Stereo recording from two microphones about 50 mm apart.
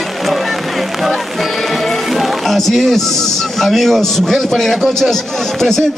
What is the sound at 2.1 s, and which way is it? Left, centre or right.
Speech, centre.